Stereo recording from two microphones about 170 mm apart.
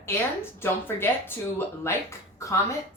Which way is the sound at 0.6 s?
15° left (ahead or behind).